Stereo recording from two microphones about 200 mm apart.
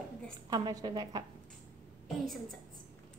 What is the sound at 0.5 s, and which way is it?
Speech, 20° right (ahead or behind).